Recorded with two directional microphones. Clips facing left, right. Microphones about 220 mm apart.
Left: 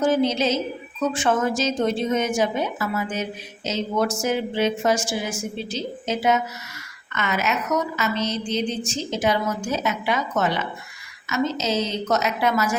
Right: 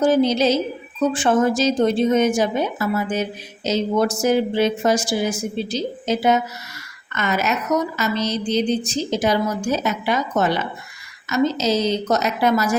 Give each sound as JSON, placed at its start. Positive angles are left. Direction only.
{"t": 0.0, "sound": "speech", "side_deg": -35}